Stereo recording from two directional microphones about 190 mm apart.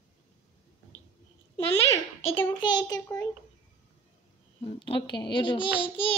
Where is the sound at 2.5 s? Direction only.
20° left (ahead or behind).